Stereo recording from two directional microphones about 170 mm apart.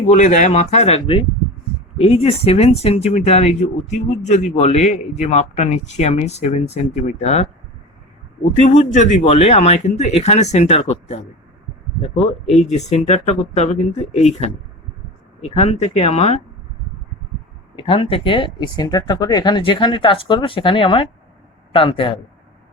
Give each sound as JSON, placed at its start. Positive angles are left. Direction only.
{"t": 0.1, "sound": "speech", "side_deg": 45}
{"t": 8.6, "sound": "speech", "side_deg": 45}
{"t": 17.7, "sound": "a man's voice", "side_deg": 30}